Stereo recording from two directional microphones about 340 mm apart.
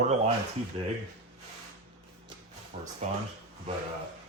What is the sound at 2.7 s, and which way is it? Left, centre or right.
Speech, right.